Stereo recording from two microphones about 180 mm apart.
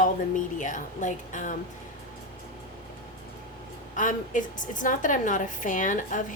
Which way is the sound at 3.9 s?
45° left (ahead or behind).